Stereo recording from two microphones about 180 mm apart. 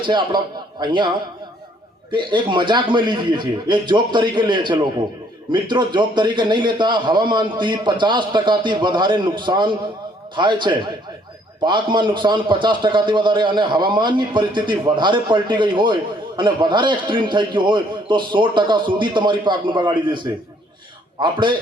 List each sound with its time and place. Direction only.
0.0 s a man's voice: 25° right (ahead or behind)